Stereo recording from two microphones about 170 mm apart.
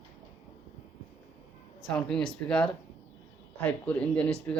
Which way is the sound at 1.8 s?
5° left (ahead or behind).